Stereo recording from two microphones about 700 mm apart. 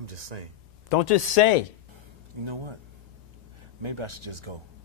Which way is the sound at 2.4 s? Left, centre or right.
Right.